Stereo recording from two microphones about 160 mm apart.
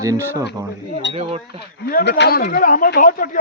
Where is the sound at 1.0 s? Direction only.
90° left.